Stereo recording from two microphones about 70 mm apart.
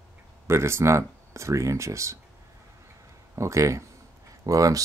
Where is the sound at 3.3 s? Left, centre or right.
Right.